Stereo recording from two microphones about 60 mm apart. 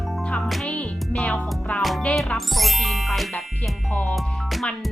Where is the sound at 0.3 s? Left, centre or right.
Centre.